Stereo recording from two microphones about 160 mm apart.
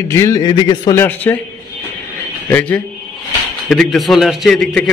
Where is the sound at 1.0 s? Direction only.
10° left (ahead or behind).